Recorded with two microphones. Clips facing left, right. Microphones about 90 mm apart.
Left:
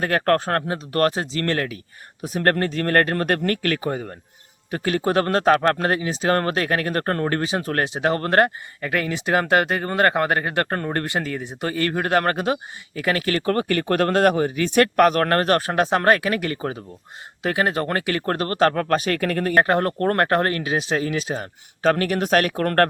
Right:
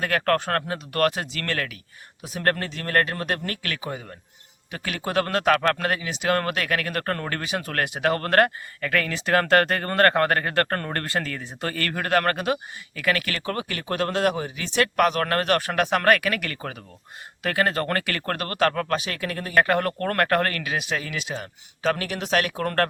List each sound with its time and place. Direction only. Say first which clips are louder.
0.0 s speech: left 3 dB; 35° left (ahead or behind)
2.2 s speech: left 5 dB; 45° left (ahead or behind)
19.5 s speech: left 1 dB; 30° left (ahead or behind); by 22.9 s 50° left (ahead or behind)